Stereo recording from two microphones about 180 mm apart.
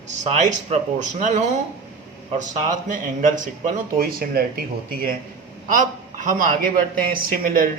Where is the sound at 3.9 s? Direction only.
55° right (ahead or behind).